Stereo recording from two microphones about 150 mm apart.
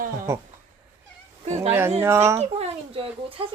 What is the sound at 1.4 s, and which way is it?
Speech, 45° right (ahead or behind).